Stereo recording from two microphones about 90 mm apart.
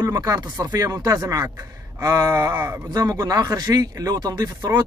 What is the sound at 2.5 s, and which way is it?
Speech, 25° right (ahead or behind).